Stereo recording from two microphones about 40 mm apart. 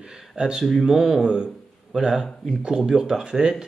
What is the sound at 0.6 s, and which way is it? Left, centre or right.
Speech, centre.